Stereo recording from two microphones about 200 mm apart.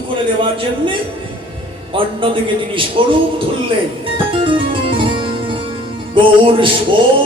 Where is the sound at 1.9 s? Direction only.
25° right (ahead or behind).